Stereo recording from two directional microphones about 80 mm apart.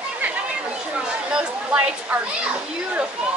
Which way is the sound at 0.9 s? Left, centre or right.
Centre.